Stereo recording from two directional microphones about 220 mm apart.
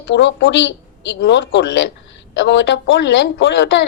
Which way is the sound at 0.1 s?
55° left (ahead or behind).